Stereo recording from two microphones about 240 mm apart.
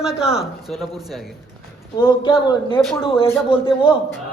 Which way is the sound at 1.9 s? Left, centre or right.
Centre.